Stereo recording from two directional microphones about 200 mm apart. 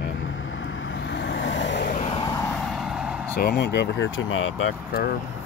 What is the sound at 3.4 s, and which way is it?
Speech, 55° left (ahead or behind).